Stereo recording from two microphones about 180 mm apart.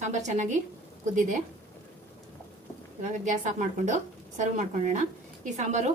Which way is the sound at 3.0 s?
40° right (ahead or behind).